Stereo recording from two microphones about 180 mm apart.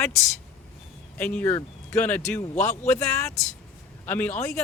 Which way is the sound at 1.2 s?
10° left (ahead or behind).